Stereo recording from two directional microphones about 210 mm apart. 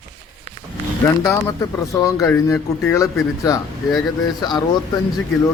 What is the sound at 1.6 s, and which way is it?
Speech, 15° left (ahead or behind).